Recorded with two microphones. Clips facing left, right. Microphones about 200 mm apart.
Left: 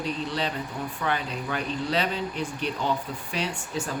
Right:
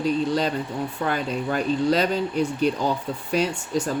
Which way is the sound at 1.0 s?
45° right (ahead or behind).